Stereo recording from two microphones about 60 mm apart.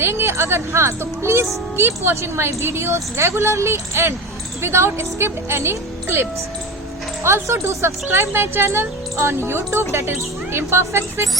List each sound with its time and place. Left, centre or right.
0.0 s a woman's voice: right
7.4 s a woman's voice: right